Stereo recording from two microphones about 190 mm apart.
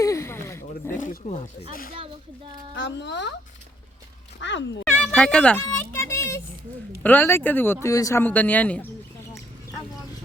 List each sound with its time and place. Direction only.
0.0 s a sound: 15° left (ahead or behind)
0.9 s wild animals: 45° left (ahead or behind)
2.7 s a child's voice: 70° left (ahead or behind)
4.4 s speech: 70° left (ahead or behind)
4.9 s speech: 5° left (ahead or behind)